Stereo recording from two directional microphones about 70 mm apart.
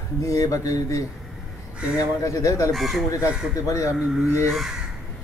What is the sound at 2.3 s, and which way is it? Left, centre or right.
Mantra, left.